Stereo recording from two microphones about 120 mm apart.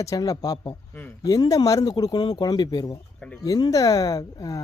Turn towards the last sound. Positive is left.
turn(degrees=30)  # may be behind; listen again after turning